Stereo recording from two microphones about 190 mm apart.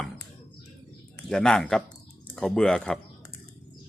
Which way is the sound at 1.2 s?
5° left (ahead or behind).